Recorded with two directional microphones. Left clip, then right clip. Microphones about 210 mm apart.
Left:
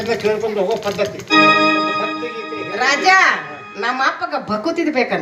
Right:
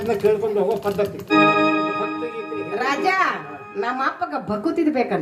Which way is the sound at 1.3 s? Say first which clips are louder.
Left 5 dB; 55° right (ahead or behind).